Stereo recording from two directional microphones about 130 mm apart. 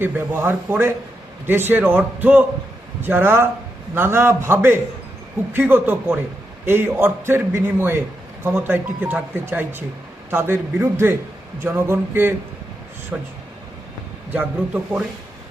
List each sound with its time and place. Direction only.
0.0 s a man's voice: 15° right (ahead or behind)
14.3 s a man's voice: 10° right (ahead or behind)